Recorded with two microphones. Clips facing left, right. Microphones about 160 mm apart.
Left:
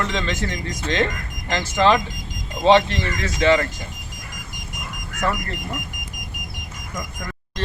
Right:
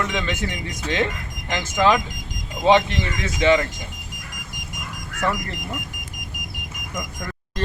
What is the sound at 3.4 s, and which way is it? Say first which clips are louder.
Speech: even; 15° right (ahead or behind).